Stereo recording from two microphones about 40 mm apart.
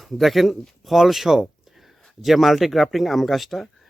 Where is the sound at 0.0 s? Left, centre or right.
Centre.